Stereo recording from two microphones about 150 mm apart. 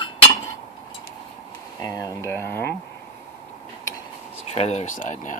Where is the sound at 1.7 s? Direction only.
25° left (ahead or behind).